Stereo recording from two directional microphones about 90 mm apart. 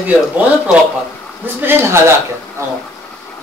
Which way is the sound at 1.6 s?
30° right (ahead or behind).